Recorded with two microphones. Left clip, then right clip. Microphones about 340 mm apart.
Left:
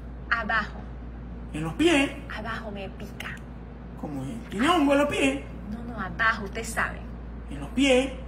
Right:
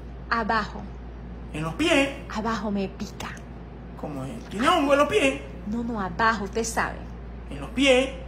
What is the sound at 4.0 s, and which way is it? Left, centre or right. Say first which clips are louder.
A man's voice: right 1 dB; centre.